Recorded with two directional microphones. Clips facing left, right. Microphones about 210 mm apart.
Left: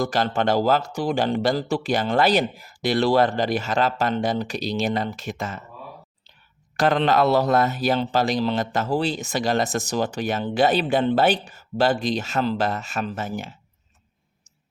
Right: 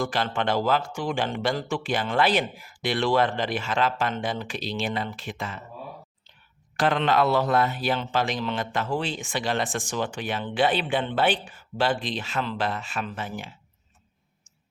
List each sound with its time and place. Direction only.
0.0 s speech: 40° left (ahead or behind)
6.7 s speech: 40° left (ahead or behind)